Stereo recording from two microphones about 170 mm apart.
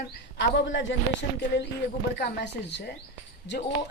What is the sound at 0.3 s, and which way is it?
Speech, 90° left.